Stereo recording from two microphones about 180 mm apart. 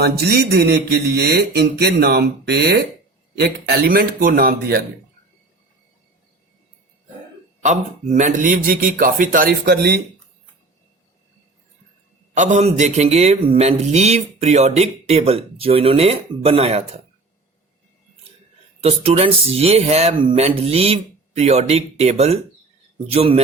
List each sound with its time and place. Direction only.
0.0 s speech: 65° right (ahead or behind)
7.6 s a man's voice: 40° right (ahead or behind); by 10.0 s 60° right (ahead or behind)
12.3 s a man's voice: 40° right (ahead or behind)
18.8 s a man's voice: 35° right (ahead or behind)